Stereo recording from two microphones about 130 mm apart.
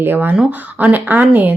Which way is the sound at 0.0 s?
15° right (ahead or behind).